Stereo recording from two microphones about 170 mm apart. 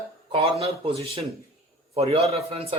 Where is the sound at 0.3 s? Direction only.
30° right (ahead or behind).